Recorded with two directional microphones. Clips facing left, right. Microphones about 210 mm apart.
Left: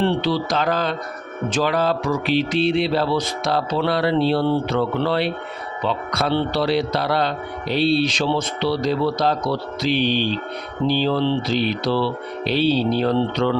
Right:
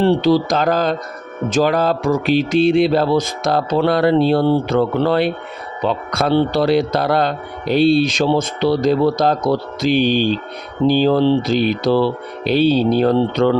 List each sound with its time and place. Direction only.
0.0 s a man's voice: 40° right (ahead or behind)